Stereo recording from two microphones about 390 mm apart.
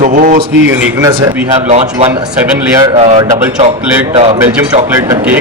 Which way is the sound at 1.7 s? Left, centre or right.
Centre.